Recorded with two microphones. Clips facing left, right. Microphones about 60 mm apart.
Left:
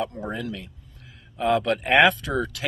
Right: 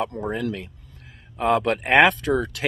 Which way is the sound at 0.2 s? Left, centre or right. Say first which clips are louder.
Right 4 dB; right.